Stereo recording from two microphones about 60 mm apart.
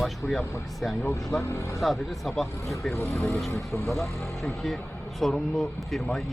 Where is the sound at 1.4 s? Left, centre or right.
Left.